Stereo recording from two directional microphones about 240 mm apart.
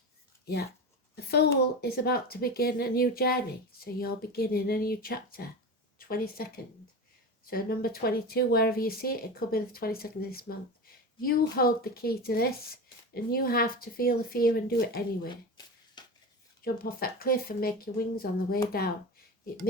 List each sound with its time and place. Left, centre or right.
1.1 s speech: left
7.5 s speech: left
15.3 s a sound: centre
16.6 s speech: left